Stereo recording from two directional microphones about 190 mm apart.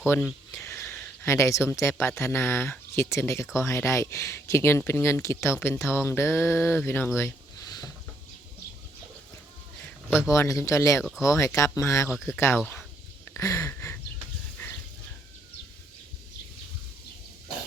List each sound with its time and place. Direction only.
0.1 s a sound: 10° left (ahead or behind)
0.9 s speech: 5° left (ahead or behind)
10.2 s speech: 15° left (ahead or behind)
12.1 s speech: 5° right (ahead or behind)
13.3 s speech: 15° left (ahead or behind)
14.6 s a sound: 10° left (ahead or behind)